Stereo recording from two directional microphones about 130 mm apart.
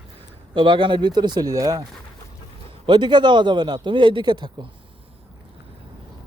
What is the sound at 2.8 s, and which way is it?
Speech, 35° right (ahead or behind).